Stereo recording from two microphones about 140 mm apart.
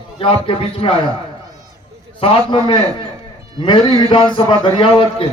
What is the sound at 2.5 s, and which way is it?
Speech, 35° left (ahead or behind).